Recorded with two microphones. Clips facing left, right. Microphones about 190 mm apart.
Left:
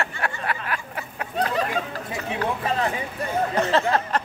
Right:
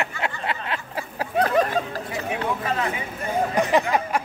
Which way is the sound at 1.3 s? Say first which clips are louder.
Right 4 dB; 50° right (ahead or behind).